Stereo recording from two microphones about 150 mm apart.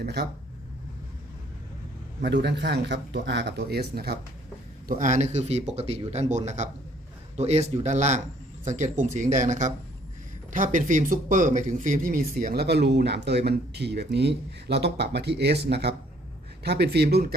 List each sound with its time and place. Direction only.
0.0 s speech: 90° right
2.2 s speech: 90° right
4.9 s speech: 60° right (ahead or behind); by 17.3 s 90° right